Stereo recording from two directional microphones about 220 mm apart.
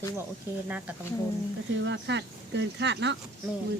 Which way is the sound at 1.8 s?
55° right (ahead or behind).